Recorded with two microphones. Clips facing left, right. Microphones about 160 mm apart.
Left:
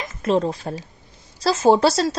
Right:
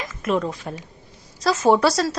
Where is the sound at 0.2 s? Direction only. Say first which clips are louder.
Left 3 dB; 30° left (ahead or behind).